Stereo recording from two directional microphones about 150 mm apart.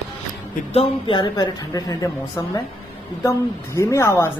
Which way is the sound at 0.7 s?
35° left (ahead or behind).